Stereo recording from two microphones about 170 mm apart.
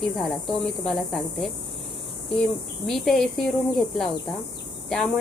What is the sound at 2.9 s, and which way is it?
Speech, centre (ahead or behind).